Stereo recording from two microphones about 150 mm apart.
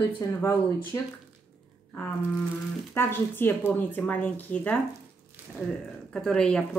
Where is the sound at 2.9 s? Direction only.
15° left (ahead or behind).